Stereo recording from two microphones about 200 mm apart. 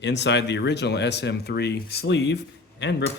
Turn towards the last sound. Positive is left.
turn(degrees=60)  # may be behind; listen again after turning